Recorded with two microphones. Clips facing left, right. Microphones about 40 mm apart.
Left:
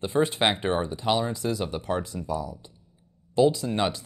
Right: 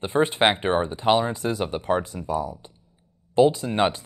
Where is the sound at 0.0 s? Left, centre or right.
Right.